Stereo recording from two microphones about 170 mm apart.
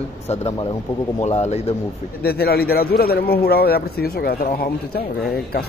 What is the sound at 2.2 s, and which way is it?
A man's voice, 65° left (ahead or behind).